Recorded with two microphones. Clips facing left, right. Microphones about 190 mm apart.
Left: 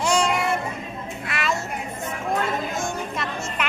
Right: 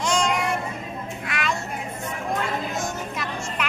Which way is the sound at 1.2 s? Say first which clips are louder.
Left 2 dB; centre (ahead or behind).